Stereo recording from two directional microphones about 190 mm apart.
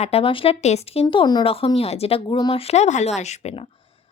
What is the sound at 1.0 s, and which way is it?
A woman's voice, 20° left (ahead or behind).